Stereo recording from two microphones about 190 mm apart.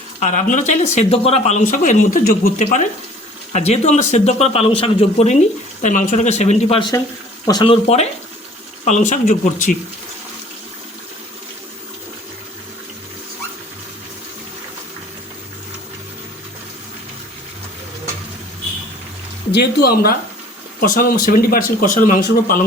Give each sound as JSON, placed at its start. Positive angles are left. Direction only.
{"t": 0.2, "sound": "speech", "side_deg": 40}
{"t": 19.5, "sound": "speech", "side_deg": 55}